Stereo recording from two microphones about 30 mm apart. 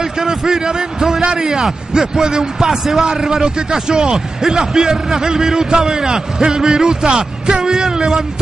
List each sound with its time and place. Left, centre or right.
0.2 s a man's voice: right